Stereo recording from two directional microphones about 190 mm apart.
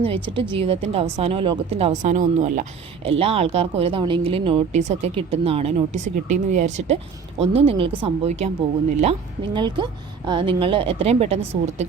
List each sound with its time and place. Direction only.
0.0 s a woman's voice: 30° right (ahead or behind)